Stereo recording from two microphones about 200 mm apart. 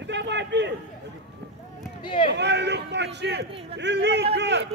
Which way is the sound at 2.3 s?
60° right (ahead or behind).